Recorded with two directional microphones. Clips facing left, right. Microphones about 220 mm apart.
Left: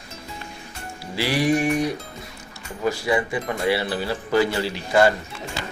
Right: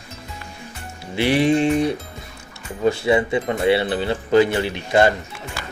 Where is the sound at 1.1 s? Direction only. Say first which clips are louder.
Right 4 dB; 20° right (ahead or behind).